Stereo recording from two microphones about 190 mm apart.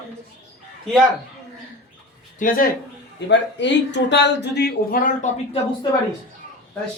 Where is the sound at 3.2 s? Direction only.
65° left (ahead or behind); by 5.3 s 45° left (ahead or behind).